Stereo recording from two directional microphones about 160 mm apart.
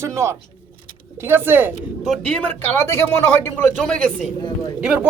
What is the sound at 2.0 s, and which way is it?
Speech, 5° left (ahead or behind).